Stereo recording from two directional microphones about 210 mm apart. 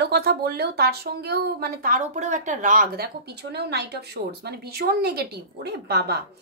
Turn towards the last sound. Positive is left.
turn(degrees=-50)  # may be behind; listen again after turning